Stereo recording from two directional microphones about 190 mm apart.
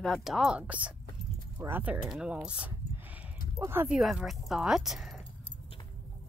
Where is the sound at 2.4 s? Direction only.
5° right (ahead or behind).